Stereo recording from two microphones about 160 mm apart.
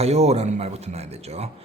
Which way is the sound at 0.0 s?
40° right (ahead or behind).